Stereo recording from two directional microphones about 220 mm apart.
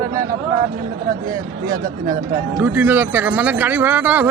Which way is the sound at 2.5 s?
10° right (ahead or behind).